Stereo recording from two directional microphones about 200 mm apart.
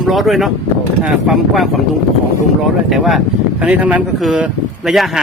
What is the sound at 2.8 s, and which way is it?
Speech, centre (ahead or behind).